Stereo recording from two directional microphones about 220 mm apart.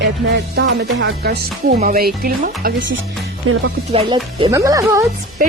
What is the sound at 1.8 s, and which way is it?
Speech, 40° right (ahead or behind).